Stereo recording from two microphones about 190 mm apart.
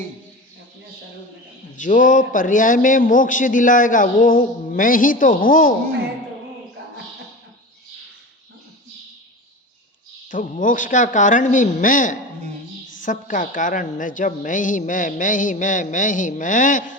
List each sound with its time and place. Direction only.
1.7 s a man's voice: 45° left (ahead or behind)
10.2 s a man's voice: 45° left (ahead or behind)